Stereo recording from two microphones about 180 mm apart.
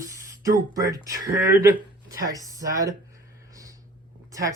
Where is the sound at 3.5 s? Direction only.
20° right (ahead or behind).